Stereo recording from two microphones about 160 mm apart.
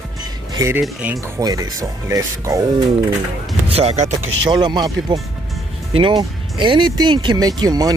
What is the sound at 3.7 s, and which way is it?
Speech, 40° right (ahead or behind).